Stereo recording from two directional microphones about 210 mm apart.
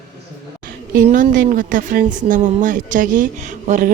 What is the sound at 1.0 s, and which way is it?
Speech, 40° right (ahead or behind).